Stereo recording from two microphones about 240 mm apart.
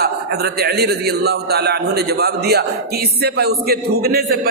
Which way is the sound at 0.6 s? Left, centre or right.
Right.